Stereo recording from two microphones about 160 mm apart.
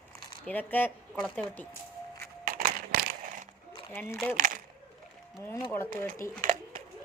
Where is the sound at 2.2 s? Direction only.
60° right (ahead or behind).